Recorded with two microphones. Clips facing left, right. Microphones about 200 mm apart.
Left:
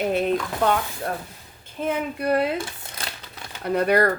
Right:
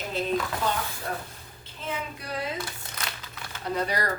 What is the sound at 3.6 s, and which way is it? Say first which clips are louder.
Speech: left 9 dB; 60° left (ahead or behind).